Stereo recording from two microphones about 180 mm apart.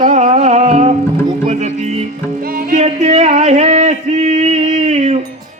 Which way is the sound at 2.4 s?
55° right (ahead or behind).